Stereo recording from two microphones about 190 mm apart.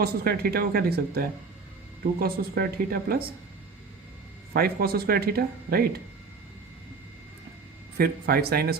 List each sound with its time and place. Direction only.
0.0 s speech: 50° right (ahead or behind)
4.5 s speech: 55° right (ahead or behind)
7.9 s speech: 55° right (ahead or behind)